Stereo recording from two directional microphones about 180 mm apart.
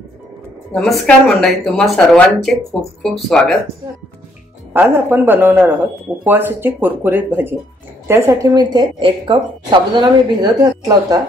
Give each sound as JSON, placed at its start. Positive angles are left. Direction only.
{"t": 0.7, "sound": "speech", "side_deg": 0}
{"t": 4.7, "sound": "a woman's voice", "side_deg": -15}